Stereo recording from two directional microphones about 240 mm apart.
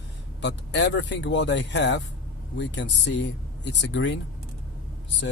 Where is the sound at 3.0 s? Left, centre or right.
Left.